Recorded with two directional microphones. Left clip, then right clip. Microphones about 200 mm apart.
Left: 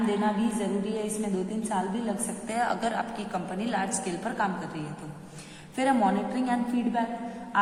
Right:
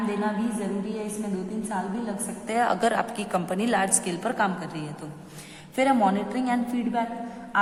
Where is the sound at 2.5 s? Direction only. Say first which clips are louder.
Right 5 dB; 35° right (ahead or behind).